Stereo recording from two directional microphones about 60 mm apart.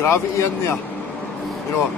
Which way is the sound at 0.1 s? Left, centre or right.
Left.